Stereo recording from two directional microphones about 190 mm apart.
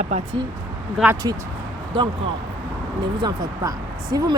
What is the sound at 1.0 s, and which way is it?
Speech, centre (ahead or behind).